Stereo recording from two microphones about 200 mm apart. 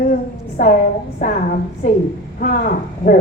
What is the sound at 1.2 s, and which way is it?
A woman's voice, 40° left (ahead or behind).